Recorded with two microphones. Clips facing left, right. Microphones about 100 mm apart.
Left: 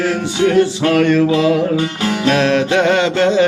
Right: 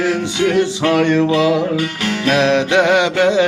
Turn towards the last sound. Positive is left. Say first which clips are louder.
# even
turn(degrees=-15)  # may be behind; listen again after turning